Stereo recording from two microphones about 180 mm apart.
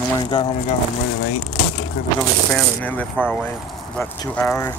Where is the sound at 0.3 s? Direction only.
25° left (ahead or behind).